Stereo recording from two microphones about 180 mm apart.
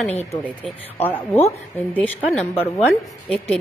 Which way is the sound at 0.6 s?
10° left (ahead or behind).